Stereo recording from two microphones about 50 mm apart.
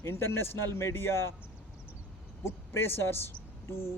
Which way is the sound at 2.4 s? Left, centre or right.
Left.